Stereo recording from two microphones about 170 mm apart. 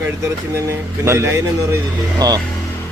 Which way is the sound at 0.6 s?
15° right (ahead or behind).